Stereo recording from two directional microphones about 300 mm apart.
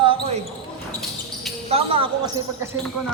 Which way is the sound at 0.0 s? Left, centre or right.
Centre.